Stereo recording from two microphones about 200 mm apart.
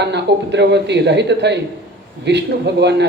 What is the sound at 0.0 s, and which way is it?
A woman's voice, 60° right (ahead or behind).